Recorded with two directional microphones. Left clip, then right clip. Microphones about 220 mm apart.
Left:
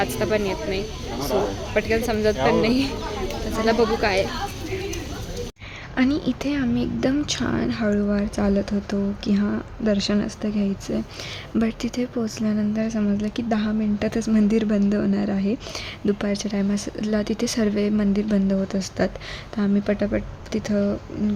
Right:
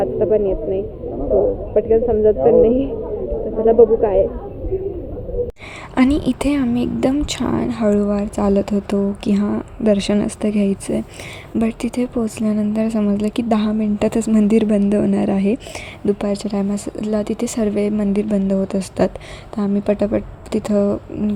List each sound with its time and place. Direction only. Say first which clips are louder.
0.0 s speech: right 6 dB; 15° left (ahead or behind)
1.7 s speech: right 7 dB; 20° left (ahead or behind)
6.1 s speech: right 6 dB; 15° right (ahead or behind)